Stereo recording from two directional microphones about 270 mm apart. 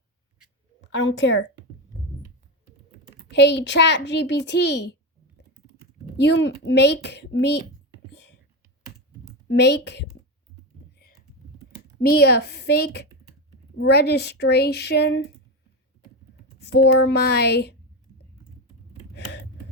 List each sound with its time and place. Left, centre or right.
0.8 s a woman's voice: left
3.3 s a child's voice: left
6.1 s a child's voice: left
9.5 s a child's voice: left
11.9 s a child's voice: left
16.6 s a child's voice: left